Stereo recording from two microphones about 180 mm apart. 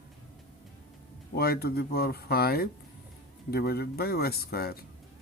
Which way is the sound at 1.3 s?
60° left (ahead or behind).